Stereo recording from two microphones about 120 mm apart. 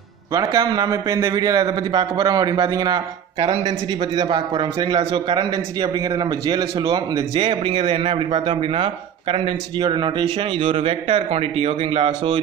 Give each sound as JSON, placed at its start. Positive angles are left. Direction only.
{"t": 0.3, "sound": "a man's voice", "side_deg": -30}
{"t": 7.3, "sound": "a man's voice", "side_deg": -45}